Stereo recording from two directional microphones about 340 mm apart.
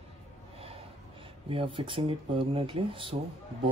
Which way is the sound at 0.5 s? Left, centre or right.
Centre.